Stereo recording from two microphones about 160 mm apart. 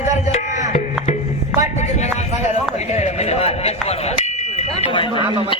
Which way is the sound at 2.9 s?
45° left (ahead or behind).